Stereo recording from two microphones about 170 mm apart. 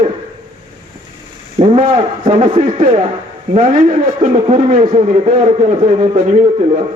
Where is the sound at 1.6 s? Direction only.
40° right (ahead or behind).